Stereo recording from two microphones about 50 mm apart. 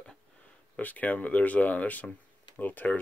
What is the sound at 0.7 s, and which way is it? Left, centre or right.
Speech, left.